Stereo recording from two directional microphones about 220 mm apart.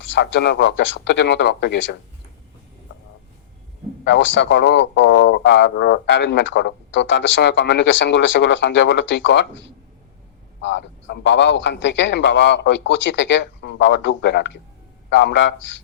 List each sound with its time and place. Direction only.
0.1 s a man's voice: 50° left (ahead or behind)
4.0 s a man's voice: 55° left (ahead or behind)
10.6 s a man's voice: 55° left (ahead or behind)